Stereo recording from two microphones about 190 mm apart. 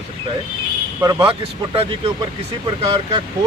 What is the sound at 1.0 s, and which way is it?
Speech, 20° right (ahead or behind).